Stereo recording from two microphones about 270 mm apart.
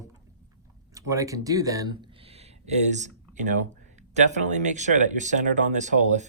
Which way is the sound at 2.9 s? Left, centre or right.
Right.